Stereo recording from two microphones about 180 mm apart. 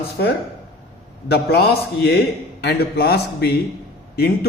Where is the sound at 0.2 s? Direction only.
60° left (ahead or behind).